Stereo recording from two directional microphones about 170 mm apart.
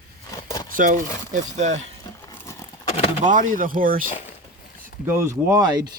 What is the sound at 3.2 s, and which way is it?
Speech, 50° right (ahead or behind).